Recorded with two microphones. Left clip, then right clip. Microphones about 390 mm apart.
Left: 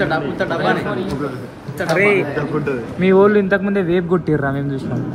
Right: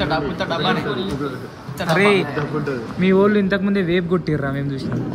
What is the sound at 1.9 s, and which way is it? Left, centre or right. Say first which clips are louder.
A man's voice: left 1 dB; centre.